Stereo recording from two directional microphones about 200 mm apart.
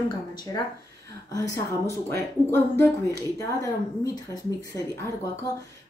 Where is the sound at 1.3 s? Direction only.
15° left (ahead or behind).